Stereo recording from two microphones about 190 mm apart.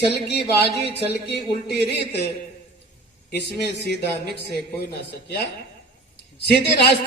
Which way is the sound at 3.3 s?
60° left (ahead or behind).